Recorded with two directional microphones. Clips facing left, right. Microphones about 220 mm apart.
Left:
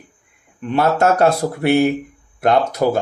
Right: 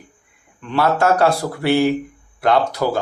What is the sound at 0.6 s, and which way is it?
Speech, 20° left (ahead or behind).